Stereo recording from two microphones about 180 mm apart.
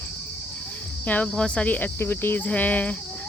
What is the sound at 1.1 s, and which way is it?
Cricket, 5° left (ahead or behind).